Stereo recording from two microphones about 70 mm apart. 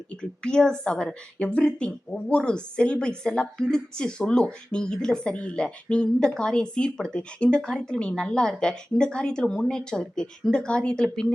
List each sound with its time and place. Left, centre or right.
0.1 s a woman's voice: centre